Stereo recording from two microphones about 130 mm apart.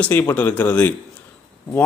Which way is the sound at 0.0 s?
10° left (ahead or behind).